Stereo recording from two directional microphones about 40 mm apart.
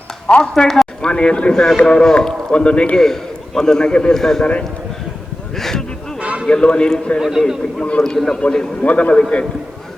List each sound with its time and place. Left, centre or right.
0.4 s a man's voice: centre
1.1 s a man's voice: left
3.0 s a man's voice: centre
4.2 s a man's voice: centre
5.5 s a sound: centre
6.1 s a sound: right
6.5 s a man's voice: left
7.2 s a man's voice: centre
8.0 s a man's voice: centre
8.4 s a man's voice: left
8.8 s a man's voice: left